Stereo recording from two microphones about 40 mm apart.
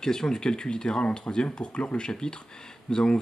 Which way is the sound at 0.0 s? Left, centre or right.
Centre.